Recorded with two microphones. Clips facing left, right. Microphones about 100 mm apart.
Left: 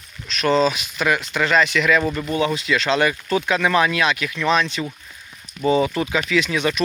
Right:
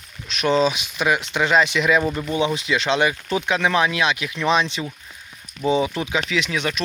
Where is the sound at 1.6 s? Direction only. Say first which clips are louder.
Left 1 dB; 25° right (ahead or behind).